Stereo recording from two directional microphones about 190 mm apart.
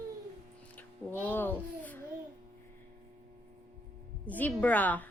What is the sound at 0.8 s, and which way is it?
Speech, 10° left (ahead or behind).